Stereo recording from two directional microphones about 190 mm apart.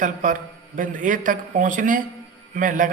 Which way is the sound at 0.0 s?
45° right (ahead or behind).